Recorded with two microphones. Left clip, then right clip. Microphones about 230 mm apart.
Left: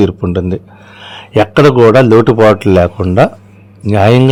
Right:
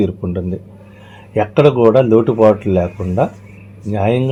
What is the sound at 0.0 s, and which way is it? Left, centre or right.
Speech, left.